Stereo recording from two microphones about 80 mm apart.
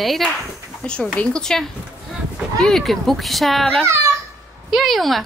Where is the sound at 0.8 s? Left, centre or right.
Centre.